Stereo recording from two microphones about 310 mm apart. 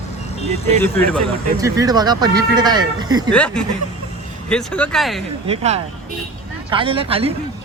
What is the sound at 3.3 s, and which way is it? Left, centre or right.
Speech, centre.